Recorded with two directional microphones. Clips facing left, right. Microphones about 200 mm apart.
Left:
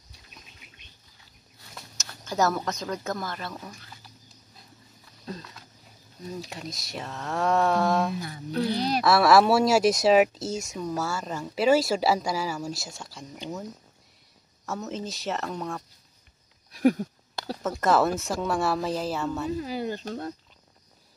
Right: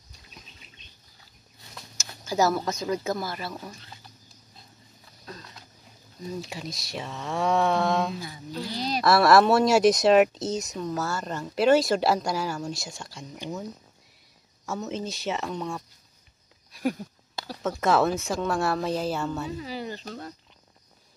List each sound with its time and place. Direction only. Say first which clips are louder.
2.0 s speech: right 2 dB; 5° right (ahead or behind)
6.5 s speech: right 1 dB; centre (ahead or behind)
8.2 s speech: left 6 dB; 60° left (ahead or behind)
9.0 s speech: right 1 dB; 5° left (ahead or behind)
14.7 s speech: right 1 dB; centre (ahead or behind)
17.6 s speech: even; centre (ahead or behind)
19.6 s speech: left 4 dB; 50° left (ahead or behind)